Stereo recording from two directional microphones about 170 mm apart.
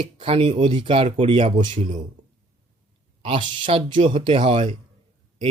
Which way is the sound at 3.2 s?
30° right (ahead or behind).